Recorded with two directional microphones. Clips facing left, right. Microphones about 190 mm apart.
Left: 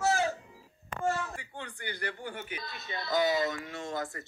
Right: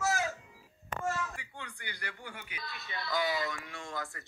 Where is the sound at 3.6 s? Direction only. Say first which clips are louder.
Left 6 dB; 35° left (ahead or behind).